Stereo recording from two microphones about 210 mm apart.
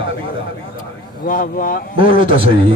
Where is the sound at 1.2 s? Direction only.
40° left (ahead or behind).